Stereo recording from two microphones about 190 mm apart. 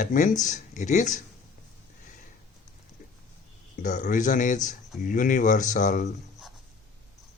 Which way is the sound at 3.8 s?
40° left (ahead or behind).